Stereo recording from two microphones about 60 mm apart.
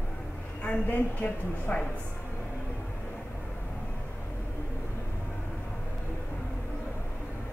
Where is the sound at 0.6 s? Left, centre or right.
Left.